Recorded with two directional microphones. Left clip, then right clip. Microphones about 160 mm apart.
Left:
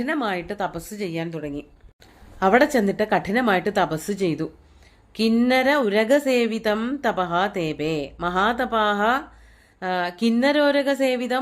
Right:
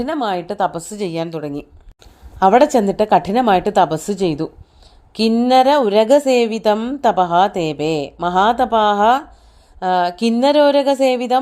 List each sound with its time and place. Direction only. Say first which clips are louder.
0.1 s a woman's voice: right 4 dB; 30° right (ahead or behind); by 1.6 s 45° right (ahead or behind)
2.4 s a woman's voice: right 6 dB; 30° right (ahead or behind)
5.5 s a woman's voice: right 9 dB; 30° right (ahead or behind)